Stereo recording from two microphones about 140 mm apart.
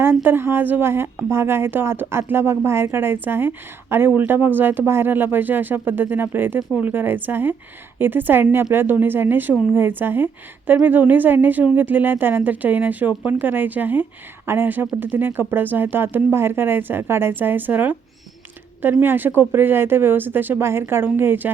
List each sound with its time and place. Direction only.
0.0 s a woman's voice: 15° right (ahead or behind)
6.6 s speech: 5° right (ahead or behind)
6.8 s a woman's voice: 15° right (ahead or behind)